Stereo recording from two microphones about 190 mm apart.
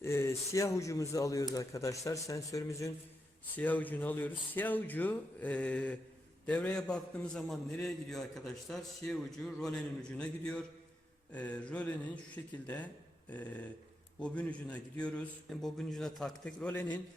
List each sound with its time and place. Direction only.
0.0 s a man's voice: 15° left (ahead or behind)